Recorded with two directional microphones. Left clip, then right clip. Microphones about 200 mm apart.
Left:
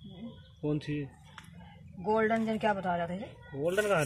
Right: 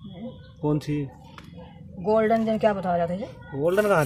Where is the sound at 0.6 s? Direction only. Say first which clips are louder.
Right 8 dB; 20° right (ahead or behind).